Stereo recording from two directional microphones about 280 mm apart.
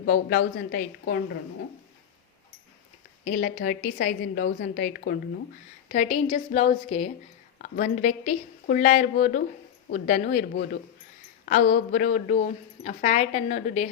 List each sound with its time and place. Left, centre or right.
0.0 s a woman's voice: left
3.2 s a woman's voice: left
5.9 s a woman's voice: left